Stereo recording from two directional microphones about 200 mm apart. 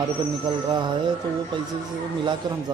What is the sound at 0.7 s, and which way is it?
Speech, 20° right (ahead or behind).